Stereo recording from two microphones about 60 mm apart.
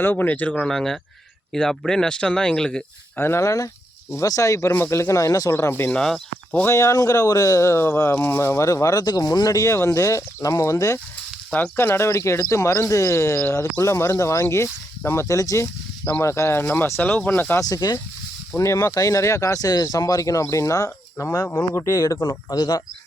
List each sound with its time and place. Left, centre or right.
0.0 s speech: left
0.7 s speech: centre
3.2 s speech: left
4.7 s speech: left
6.7 s speech: left
8.6 s speech: left
11.8 s speech: left
16.2 s speech: left
17.0 s speech: left
17.6 s speech: left
18.5 s speech: left
21.8 s speech: left